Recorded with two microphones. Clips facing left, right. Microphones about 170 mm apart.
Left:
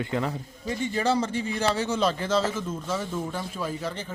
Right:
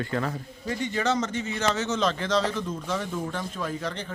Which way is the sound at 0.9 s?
30° left (ahead or behind).